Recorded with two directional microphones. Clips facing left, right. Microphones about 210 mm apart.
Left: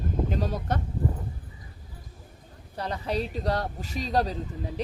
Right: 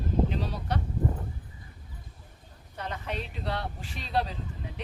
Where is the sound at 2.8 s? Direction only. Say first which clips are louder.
Left 6 dB; 35° left (ahead or behind).